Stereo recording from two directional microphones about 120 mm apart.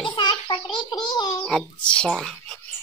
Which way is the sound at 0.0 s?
40° left (ahead or behind).